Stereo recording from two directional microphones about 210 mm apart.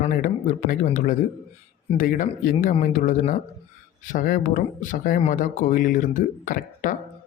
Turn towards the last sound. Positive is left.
turn(degrees=40)  # may be behind; listen again after turning